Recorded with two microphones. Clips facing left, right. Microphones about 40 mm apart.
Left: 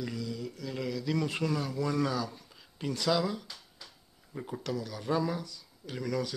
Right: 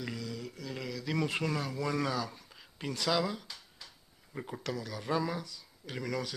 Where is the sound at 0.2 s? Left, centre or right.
Right.